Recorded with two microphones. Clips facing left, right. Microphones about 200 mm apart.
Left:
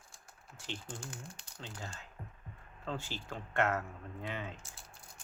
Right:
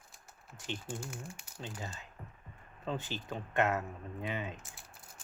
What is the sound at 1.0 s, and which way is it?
Speech, 5° right (ahead or behind).